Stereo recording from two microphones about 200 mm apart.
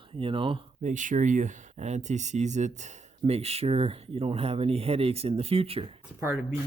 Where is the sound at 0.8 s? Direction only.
40° right (ahead or behind).